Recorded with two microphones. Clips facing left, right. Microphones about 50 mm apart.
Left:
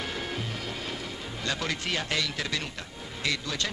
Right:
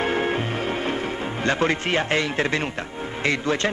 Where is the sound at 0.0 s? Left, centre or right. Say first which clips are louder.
Right 11 dB; right.